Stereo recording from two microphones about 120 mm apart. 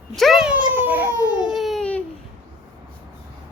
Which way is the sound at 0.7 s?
15° right (ahead or behind).